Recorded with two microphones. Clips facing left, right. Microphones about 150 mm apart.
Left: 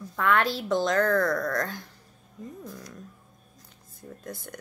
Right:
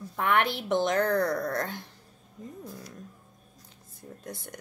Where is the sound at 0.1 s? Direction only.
20° right (ahead or behind).